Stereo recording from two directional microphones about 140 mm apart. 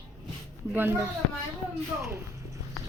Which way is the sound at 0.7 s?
15° right (ahead or behind).